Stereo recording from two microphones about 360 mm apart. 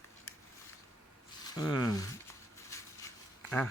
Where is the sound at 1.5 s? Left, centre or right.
Centre.